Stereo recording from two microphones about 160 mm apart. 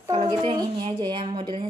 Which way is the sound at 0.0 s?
25° right (ahead or behind).